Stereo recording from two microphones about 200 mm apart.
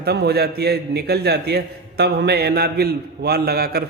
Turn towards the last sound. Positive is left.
turn(degrees=-50)  # may be behind; listen again after turning